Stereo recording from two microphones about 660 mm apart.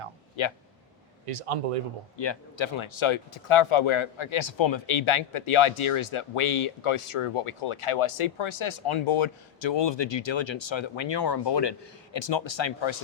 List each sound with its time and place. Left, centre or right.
0.4 s speech: left
1.3 s a man's voice: right
2.1 s speech: left